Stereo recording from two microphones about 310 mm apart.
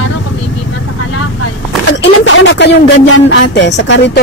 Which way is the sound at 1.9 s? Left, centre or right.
Left.